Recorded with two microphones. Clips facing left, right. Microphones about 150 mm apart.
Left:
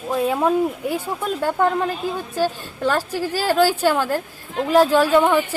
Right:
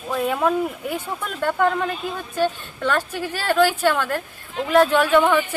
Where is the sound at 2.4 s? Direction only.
35° left (ahead or behind).